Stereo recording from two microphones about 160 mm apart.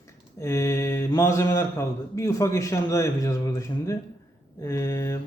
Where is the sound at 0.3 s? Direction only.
15° left (ahead or behind).